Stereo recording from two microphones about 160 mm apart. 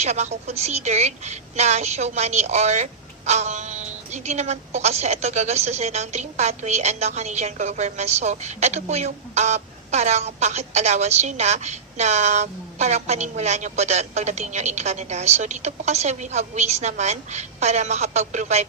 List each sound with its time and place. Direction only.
0.0 s a woman's voice: 45° right (ahead or behind)